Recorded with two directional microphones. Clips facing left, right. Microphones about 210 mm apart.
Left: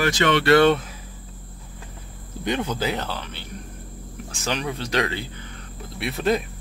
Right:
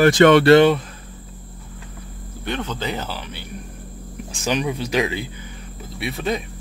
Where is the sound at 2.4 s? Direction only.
15° left (ahead or behind).